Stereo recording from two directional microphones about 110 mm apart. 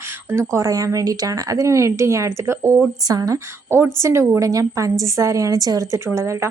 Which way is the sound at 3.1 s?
35° right (ahead or behind).